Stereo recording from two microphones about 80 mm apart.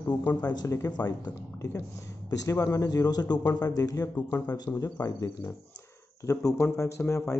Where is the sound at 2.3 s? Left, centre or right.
Left.